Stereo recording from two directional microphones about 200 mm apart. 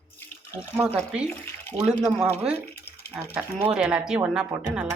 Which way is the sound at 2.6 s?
50° left (ahead or behind).